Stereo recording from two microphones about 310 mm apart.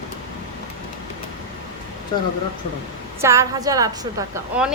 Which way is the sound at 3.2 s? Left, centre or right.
Centre.